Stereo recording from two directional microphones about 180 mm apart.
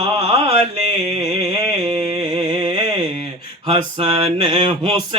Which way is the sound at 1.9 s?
35° right (ahead or behind).